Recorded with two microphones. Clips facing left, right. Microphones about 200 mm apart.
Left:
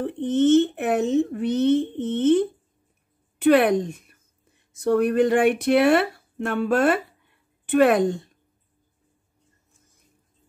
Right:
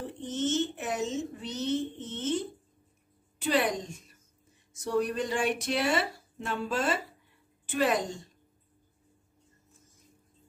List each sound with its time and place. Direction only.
0.0 s a woman's voice: 60° left (ahead or behind)